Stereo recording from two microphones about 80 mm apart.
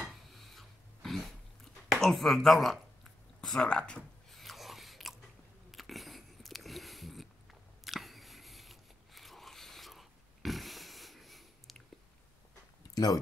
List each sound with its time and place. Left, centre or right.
0.3 s dog: centre
4.4 s writing: centre
5.7 s a sound: centre
12.9 s speech: left